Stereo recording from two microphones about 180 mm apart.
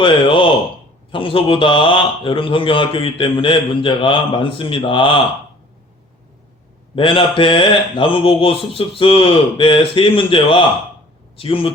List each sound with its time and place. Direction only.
0.0 s a man's voice: 30° left (ahead or behind)
6.9 s a man's voice: 30° left (ahead or behind)